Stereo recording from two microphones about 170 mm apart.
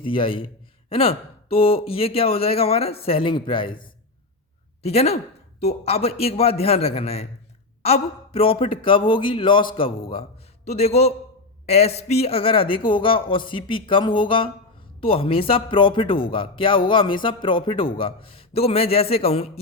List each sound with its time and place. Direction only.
0.0 s speech: 30° left (ahead or behind)
10.7 s speech: 40° left (ahead or behind)